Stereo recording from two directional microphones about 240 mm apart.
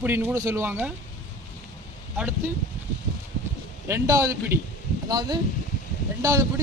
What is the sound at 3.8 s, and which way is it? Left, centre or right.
Speech, centre.